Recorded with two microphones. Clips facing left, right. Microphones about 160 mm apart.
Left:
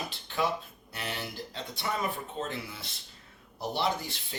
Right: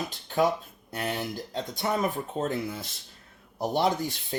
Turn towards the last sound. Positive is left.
turn(degrees=-45)  # may be behind; listen again after turning